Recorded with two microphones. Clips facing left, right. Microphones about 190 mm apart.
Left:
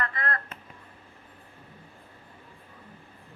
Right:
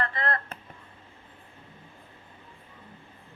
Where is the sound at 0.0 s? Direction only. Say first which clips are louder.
Right 2 dB; 30° right (ahead or behind).